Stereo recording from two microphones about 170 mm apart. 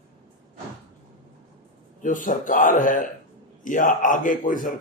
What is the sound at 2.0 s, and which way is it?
Speech, 50° left (ahead or behind).